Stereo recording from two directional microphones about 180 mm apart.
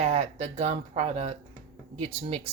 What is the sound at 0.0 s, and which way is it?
Speech, 35° right (ahead or behind).